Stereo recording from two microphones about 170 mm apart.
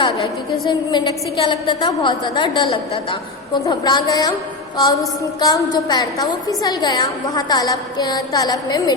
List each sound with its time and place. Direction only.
0.7 s a woman's voice: 25° left (ahead or behind)